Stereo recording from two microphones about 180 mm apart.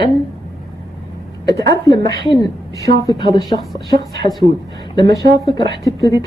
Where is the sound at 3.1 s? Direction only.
25° left (ahead or behind).